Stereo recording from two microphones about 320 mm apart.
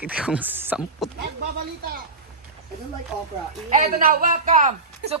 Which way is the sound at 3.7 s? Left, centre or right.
Right.